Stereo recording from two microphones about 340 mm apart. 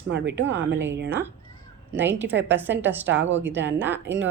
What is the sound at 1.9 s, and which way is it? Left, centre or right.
A woman's voice, centre.